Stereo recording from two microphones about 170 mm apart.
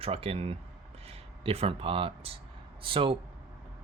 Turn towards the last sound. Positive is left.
turn(degrees=-30)  # may be behind; listen again after turning